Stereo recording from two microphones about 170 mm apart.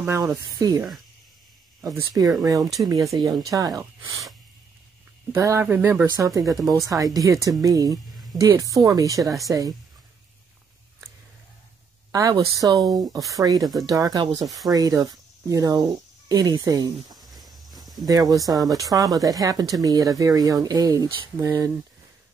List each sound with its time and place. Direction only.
0.0 s speech: 15° right (ahead or behind)
1.9 s speech: 20° right (ahead or behind)
5.3 s speech: 15° right (ahead or behind)
12.1 s speech: 20° right (ahead or behind)
17.2 s a sound: centre (ahead or behind)
18.0 s speech: 20° right (ahead or behind)